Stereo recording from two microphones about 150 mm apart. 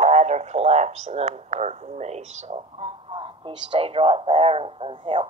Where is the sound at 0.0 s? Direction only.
45° right (ahead or behind).